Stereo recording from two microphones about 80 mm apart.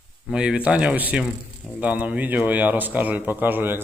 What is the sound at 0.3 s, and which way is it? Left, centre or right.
A man's voice, centre.